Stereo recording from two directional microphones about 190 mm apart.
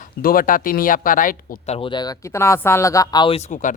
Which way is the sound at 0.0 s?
50° left (ahead or behind).